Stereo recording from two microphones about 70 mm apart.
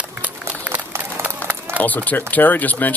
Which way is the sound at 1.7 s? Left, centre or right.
Left.